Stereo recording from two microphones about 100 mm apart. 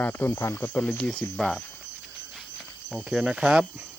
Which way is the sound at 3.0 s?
10° right (ahead or behind).